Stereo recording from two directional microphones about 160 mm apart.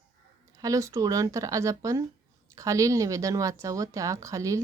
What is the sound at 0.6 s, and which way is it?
A woman's voice, 20° right (ahead or behind).